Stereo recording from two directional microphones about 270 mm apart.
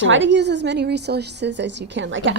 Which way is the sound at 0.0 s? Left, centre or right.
Right.